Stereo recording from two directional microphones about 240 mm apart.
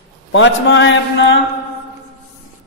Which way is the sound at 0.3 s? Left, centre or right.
Left.